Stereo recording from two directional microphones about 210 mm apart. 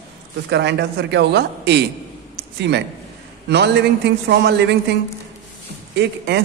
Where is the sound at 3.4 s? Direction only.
55° right (ahead or behind).